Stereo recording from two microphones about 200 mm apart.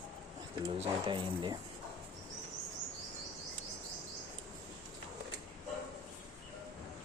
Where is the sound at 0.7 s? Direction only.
25° right (ahead or behind).